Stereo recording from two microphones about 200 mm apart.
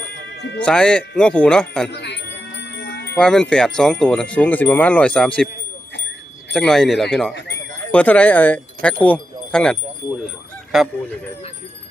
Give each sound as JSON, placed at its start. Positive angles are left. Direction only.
{"t": 0.6, "sound": "speech", "side_deg": 5}
{"t": 1.9, "sound": "wind chime", "side_deg": 60}
{"t": 3.2, "sound": "speech", "side_deg": 5}
{"t": 6.5, "sound": "speech", "side_deg": 5}
{"t": 10.7, "sound": "speech", "side_deg": 0}